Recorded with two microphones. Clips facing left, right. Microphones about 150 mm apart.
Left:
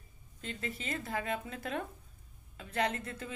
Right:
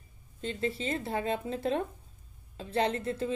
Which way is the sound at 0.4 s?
30° right (ahead or behind).